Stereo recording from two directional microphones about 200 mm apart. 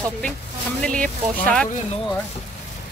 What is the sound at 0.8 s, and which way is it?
Speech, 5° left (ahead or behind).